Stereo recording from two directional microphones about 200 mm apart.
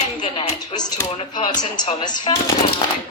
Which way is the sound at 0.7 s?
20° left (ahead or behind).